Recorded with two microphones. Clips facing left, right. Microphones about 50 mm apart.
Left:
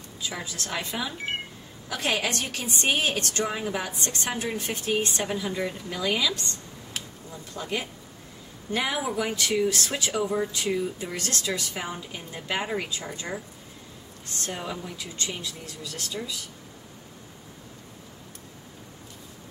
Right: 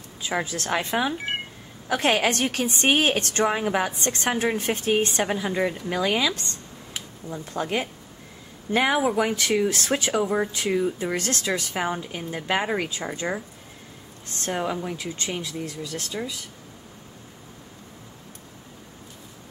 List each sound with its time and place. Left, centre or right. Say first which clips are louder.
0.2 s a woman's voice: right 7 dB; right
14.4 s a woman's voice: right 7 dB; right